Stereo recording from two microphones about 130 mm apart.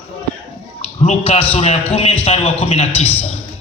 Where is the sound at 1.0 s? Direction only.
50° left (ahead or behind).